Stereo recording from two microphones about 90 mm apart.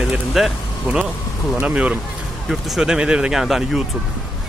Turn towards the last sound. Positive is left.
turn(degrees=-5)  # may be behind; listen again after turning